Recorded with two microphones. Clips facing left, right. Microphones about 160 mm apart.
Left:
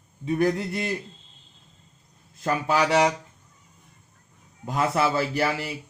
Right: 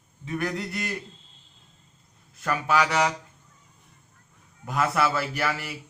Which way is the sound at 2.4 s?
25° left (ahead or behind).